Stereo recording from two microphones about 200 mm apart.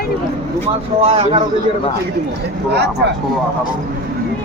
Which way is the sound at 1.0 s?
30° right (ahead or behind).